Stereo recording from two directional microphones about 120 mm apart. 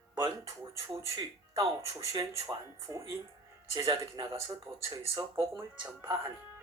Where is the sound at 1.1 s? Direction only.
30° right (ahead or behind).